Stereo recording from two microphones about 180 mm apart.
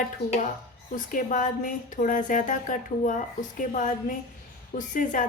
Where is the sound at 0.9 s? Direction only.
45° left (ahead or behind).